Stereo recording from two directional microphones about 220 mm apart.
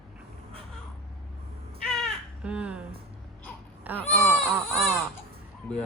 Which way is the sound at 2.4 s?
5° right (ahead or behind).